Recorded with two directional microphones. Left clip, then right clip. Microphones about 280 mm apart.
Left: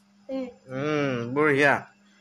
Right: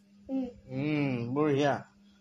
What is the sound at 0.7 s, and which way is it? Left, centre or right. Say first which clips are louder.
Groan: left 6 dB; right.